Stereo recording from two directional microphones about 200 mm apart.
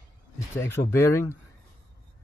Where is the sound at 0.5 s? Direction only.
10° left (ahead or behind).